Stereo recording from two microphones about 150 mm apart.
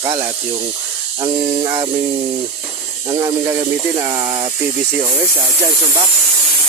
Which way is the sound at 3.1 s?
30° right (ahead or behind).